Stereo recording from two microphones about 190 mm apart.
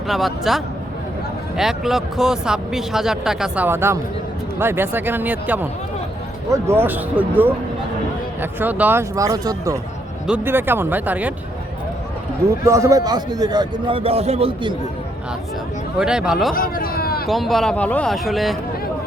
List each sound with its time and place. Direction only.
0.1 s speech: centre (ahead or behind)
12.6 s a man's voice: 15° right (ahead or behind)
16.0 s speech: 5° right (ahead or behind)
16.6 s a man's voice: 50° left (ahead or behind)
17.2 s speech: centre (ahead or behind)